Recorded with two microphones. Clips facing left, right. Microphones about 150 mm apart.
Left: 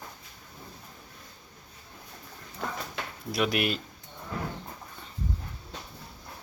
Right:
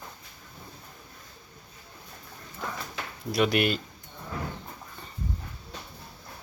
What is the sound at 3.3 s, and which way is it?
Speech, centre (ahead or behind).